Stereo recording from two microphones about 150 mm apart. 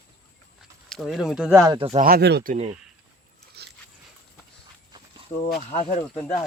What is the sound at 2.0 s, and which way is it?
Speech, 90° right.